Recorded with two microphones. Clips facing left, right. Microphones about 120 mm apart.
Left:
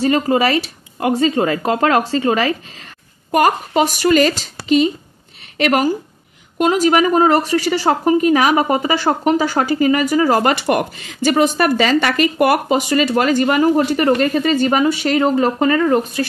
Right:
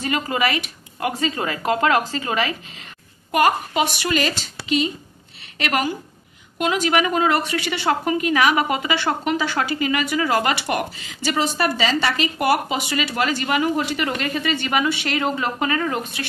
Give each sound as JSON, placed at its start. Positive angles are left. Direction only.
{"t": 0.0, "sound": "speech", "side_deg": 35}